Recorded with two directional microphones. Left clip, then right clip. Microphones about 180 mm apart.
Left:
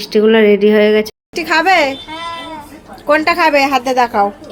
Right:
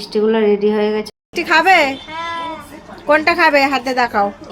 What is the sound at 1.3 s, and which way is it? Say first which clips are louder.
Speech: right 1 dB; 10° left (ahead or behind).